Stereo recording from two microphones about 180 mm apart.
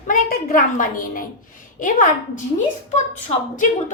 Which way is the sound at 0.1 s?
50° left (ahead or behind).